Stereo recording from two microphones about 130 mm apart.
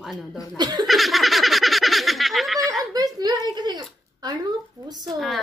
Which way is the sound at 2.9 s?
30° right (ahead or behind).